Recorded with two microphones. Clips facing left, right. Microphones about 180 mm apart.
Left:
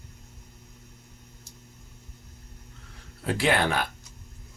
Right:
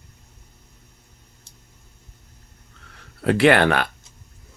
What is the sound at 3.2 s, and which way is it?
Speech, 70° right (ahead or behind).